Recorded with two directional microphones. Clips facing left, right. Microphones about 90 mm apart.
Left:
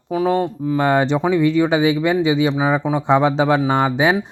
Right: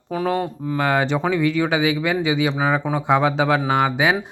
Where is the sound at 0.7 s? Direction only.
25° left (ahead or behind).